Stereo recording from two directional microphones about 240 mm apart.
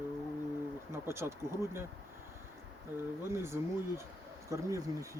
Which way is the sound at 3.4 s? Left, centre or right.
Centre.